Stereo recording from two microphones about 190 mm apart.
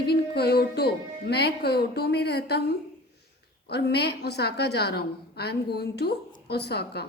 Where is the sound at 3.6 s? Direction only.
60° left (ahead or behind).